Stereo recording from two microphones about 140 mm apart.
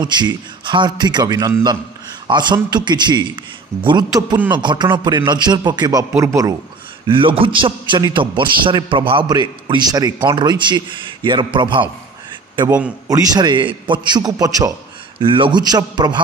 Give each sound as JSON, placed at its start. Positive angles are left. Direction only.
{"t": 0.0, "sound": "a man's voice", "side_deg": -30}
{"t": 7.1, "sound": "a man's voice", "side_deg": -40}
{"t": 12.6, "sound": "a man's voice", "side_deg": -10}
{"t": 13.1, "sound": "a man's voice", "side_deg": -25}
{"t": 15.1, "sound": "a man's voice", "side_deg": -40}